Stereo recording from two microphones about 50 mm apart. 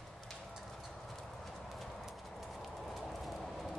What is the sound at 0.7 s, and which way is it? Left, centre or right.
Clip-clop, centre.